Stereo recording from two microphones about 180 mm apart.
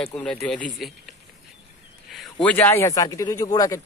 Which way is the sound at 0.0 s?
5° left (ahead or behind).